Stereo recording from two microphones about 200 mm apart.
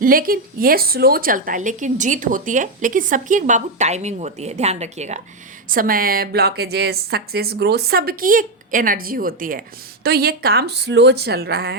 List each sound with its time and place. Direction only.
0.0 s a woman's voice: 45° right (ahead or behind)
5.7 s a woman's voice: 45° right (ahead or behind)